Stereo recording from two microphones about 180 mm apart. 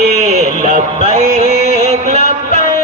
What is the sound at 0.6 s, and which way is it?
Music, 45° right (ahead or behind).